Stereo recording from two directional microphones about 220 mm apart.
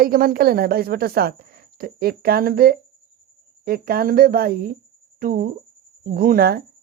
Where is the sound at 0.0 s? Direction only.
40° right (ahead or behind).